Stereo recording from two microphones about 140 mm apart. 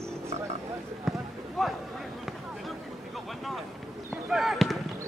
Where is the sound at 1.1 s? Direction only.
Centre (ahead or behind).